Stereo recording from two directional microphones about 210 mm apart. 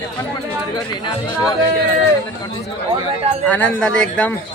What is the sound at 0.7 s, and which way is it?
Speech, 20° left (ahead or behind).